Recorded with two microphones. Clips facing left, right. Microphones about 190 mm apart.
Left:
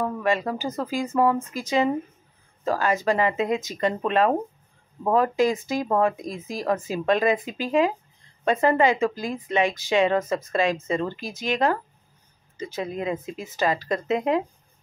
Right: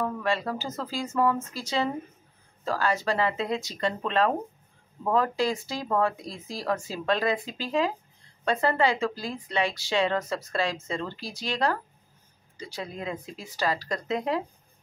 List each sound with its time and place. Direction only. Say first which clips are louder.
0.0 s speech: left 4 dB; 15° left (ahead or behind)